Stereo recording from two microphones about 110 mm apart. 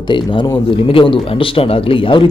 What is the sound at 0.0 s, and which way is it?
Speech, 45° left (ahead or behind).